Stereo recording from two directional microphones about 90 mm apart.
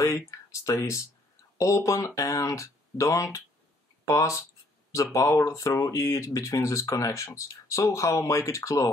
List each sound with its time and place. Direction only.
0.0 s speech: 40° left (ahead or behind)